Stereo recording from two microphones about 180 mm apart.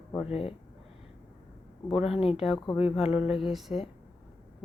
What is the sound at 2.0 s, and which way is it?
Speech, 35° left (ahead or behind).